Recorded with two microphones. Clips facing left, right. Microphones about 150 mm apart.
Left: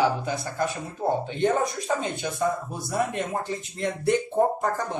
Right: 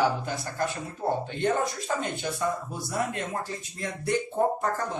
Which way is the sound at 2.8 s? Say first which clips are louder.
Left 5 dB; 20° left (ahead or behind).